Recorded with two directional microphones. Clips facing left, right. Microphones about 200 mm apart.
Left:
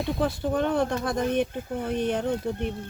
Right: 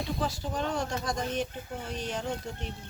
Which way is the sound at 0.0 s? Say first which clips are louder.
Left 6 dB; 55° left (ahead or behind).